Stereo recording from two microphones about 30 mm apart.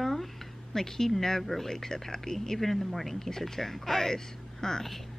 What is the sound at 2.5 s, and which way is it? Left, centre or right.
Speech, centre.